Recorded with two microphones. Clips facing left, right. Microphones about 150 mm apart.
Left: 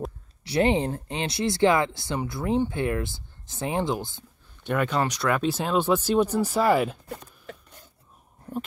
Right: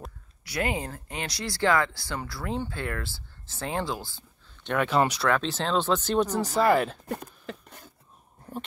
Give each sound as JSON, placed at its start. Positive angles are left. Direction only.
{"t": 0.4, "sound": "speech", "side_deg": 25}
{"t": 4.6, "sound": "speech", "side_deg": 0}
{"t": 5.3, "sound": "speech", "side_deg": 10}
{"t": 7.1, "sound": "a sound", "side_deg": -70}